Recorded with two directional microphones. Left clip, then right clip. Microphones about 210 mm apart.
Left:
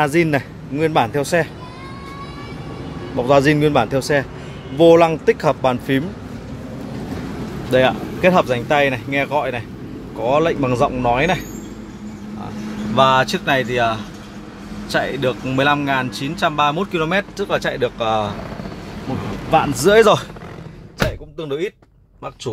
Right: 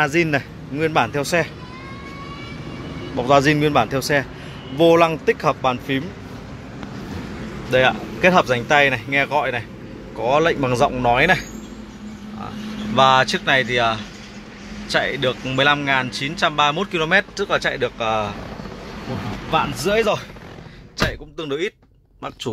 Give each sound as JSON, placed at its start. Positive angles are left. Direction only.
{"t": 0.0, "sound": "speech", "side_deg": 15}
{"t": 3.2, "sound": "speech", "side_deg": 10}
{"t": 7.7, "sound": "speech", "side_deg": 5}
{"t": 12.9, "sound": "speech", "side_deg": 5}
{"t": 19.5, "sound": "speech", "side_deg": 40}
{"t": 21.4, "sound": "speech", "side_deg": 0}